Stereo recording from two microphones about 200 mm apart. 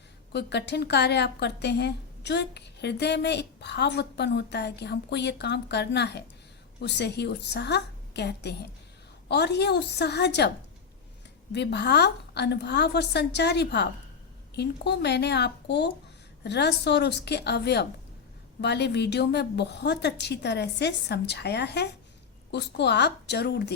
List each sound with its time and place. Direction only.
0.3 s a woman's voice: 55° left (ahead or behind)
11.5 s a woman's voice: 55° left (ahead or behind)